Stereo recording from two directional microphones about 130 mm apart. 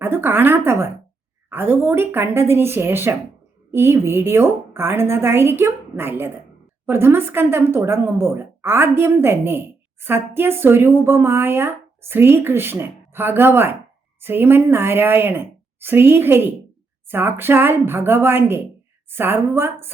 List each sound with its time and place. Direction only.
0.0 s a woman's voice: 15° right (ahead or behind)